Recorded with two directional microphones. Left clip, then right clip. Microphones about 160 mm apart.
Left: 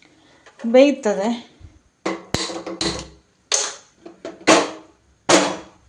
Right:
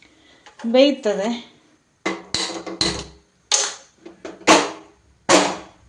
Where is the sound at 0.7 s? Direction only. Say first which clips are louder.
Left 2 dB; 15° left (ahead or behind).